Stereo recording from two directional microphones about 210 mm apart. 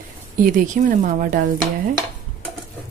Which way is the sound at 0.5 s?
40° right (ahead or behind).